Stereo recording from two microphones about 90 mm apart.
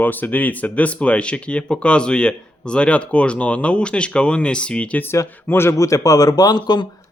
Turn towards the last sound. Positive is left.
turn(degrees=50)  # may be behind; listen again after turning